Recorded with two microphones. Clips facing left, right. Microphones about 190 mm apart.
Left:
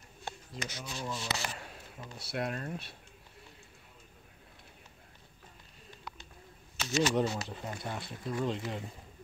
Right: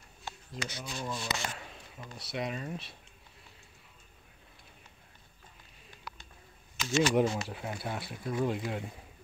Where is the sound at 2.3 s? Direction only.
Centre (ahead or behind).